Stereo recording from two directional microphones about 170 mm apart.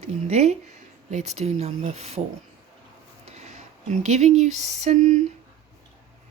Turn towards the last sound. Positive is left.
turn(degrees=-40)  # may be behind; listen again after turning